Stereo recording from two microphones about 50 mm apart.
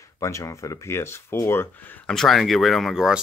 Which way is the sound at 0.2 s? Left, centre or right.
Left.